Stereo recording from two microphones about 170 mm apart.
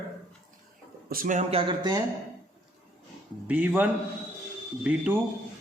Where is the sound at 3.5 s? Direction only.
10° right (ahead or behind).